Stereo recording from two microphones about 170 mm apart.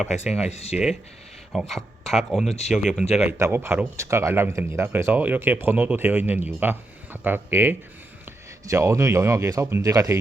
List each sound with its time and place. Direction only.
0.0 s speech: centre (ahead or behind)
0.4 s speech: 40° left (ahead or behind)
1.5 s speech: centre (ahead or behind)
3.2 s speech: 15° right (ahead or behind)